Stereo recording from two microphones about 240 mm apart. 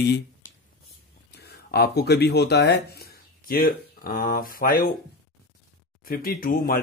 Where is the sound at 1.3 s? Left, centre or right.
Left.